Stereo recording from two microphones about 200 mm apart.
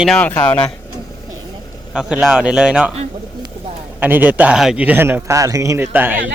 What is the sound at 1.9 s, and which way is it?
Speech, 5° right (ahead or behind).